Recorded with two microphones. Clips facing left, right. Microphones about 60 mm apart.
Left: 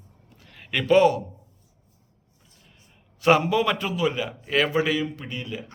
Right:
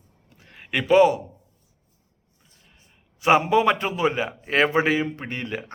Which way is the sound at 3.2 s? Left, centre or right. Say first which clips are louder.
Right 2 dB; right.